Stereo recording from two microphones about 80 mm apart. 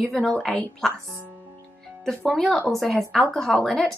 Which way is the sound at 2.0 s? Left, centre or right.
Centre.